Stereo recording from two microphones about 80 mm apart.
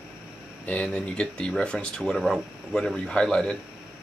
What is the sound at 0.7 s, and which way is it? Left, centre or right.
Speech, centre.